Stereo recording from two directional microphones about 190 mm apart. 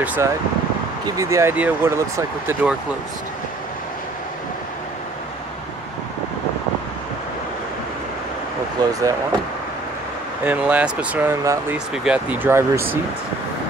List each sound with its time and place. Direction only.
0.0 s speech: 10° right (ahead or behind)
8.8 s speech: 20° right (ahead or behind)
10.4 s speech: 10° right (ahead or behind)